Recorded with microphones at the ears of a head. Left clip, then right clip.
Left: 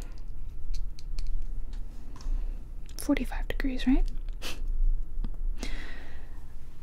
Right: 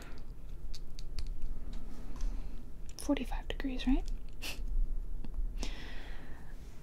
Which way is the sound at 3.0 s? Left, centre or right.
Left.